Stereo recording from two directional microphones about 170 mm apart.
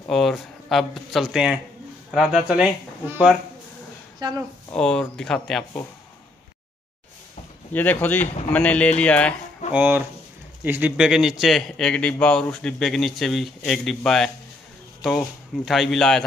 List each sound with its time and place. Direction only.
0.1 s a man's voice: centre (ahead or behind)
4.2 s a woman's voice: 25° right (ahead or behind)
4.7 s a man's voice: 5° left (ahead or behind)
7.7 s speech: 10° left (ahead or behind)
9.7 s a man's voice: 10° right (ahead or behind)